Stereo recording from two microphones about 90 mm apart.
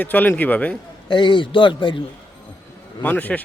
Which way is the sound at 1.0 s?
60° left (ahead or behind).